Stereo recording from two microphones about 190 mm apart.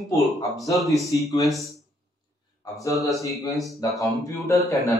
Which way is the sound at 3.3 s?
Centre (ahead or behind).